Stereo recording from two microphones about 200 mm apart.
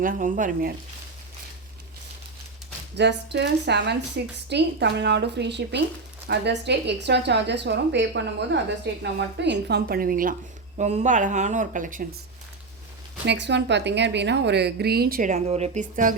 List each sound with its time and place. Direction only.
0.0 s a woman's voice: 45° right (ahead or behind)
2.9 s a woman's voice: 60° right (ahead or behind); by 12.0 s 40° right (ahead or behind)
13.2 s a woman's voice: 60° right (ahead or behind); by 16.1 s 40° right (ahead or behind)